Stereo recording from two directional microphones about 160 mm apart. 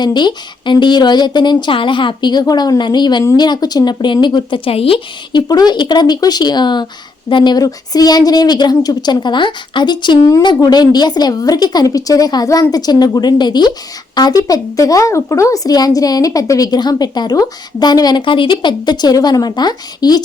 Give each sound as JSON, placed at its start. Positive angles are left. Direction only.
{"t": 0.0, "sound": "a woman's voice", "side_deg": 25}